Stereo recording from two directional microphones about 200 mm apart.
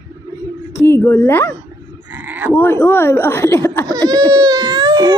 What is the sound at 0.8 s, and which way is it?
Speech, 15° left (ahead or behind).